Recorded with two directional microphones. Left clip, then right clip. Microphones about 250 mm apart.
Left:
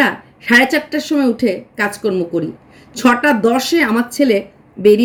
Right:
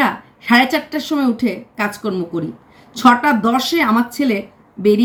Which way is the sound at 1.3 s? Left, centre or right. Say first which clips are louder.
Left 4 dB; right.